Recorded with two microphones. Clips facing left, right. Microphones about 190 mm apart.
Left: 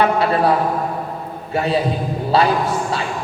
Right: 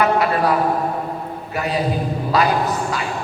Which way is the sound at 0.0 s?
30° left (ahead or behind).